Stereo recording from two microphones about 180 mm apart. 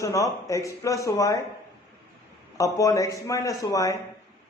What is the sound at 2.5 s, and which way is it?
A man's voice, 20° left (ahead or behind).